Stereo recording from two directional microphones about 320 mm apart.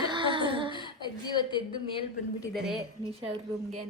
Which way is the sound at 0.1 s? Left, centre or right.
Centre.